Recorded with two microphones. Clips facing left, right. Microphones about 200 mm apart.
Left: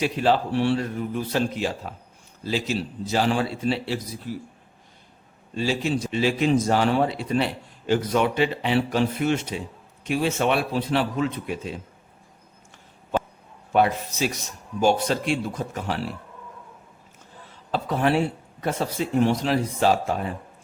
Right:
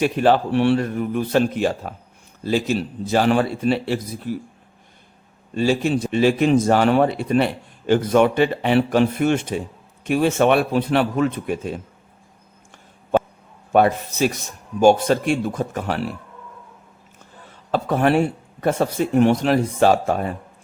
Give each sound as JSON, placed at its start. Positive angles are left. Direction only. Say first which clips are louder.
{"t": 0.0, "sound": "speech", "louder": "right 5 dB", "side_deg": -55}
{"t": 5.5, "sound": "a man's voice", "louder": "right 5 dB", "side_deg": -55}
{"t": 13.7, "sound": "a man's voice", "louder": "right 4 dB", "side_deg": -50}
{"t": 17.7, "sound": "speech", "louder": "right 4 dB", "side_deg": -55}